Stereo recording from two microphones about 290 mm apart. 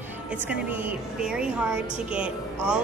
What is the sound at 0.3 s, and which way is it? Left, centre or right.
A woman's voice, centre.